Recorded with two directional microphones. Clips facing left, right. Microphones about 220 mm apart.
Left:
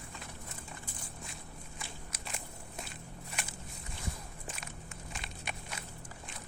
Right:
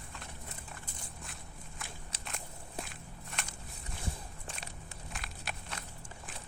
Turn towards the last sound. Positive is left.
turn(degrees=0)  # may be behind; listen again after turning